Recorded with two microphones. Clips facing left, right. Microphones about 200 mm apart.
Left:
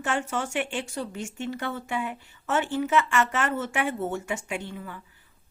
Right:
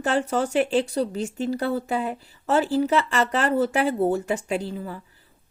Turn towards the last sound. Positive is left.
turn(degrees=-35)  # may be behind; listen again after turning